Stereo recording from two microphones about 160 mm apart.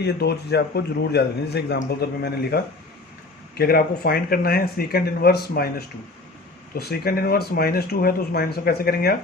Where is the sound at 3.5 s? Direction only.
75° left (ahead or behind).